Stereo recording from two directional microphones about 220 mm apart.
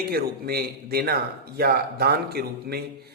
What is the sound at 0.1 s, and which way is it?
A man's voice, 45° right (ahead or behind).